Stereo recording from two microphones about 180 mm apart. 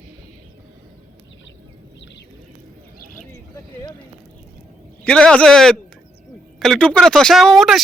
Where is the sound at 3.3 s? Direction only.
15° left (ahead or behind).